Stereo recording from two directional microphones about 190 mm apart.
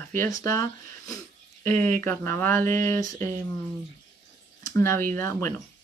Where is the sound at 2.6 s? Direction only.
45° right (ahead or behind).